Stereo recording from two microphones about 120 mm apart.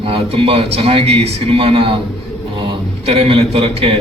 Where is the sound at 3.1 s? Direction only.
50° right (ahead or behind).